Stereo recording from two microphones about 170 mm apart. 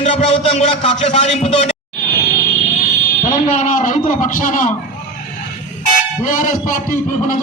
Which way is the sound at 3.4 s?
50° left (ahead or behind).